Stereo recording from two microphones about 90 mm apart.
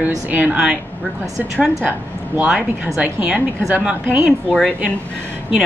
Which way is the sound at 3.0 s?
15° right (ahead or behind).